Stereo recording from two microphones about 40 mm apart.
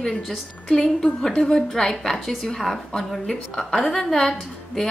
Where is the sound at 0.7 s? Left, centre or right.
Centre.